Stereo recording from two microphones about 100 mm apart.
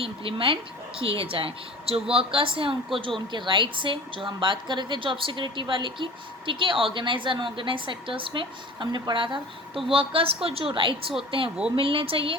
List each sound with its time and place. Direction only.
0.0 s a woman's voice: 65° right (ahead or behind)